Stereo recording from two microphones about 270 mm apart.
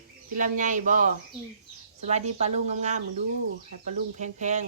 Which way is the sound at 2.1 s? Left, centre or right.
Right.